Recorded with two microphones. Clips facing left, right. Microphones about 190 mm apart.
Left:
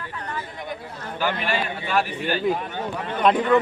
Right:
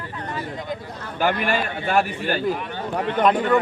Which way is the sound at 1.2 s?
50° right (ahead or behind).